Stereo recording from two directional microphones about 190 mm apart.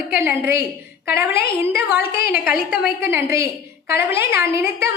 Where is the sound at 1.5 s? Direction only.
30° left (ahead or behind).